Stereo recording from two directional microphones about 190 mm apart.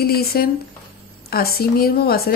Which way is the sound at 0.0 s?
55° left (ahead or behind).